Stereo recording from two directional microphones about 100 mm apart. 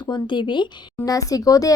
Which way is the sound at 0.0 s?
50° left (ahead or behind).